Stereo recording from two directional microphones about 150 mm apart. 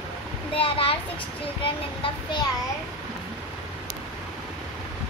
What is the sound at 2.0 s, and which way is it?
Speech, 30° left (ahead or behind).